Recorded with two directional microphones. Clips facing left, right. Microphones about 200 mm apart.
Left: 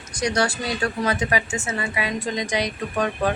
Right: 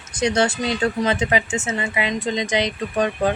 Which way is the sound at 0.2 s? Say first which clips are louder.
Right 3 dB; 25° right (ahead or behind).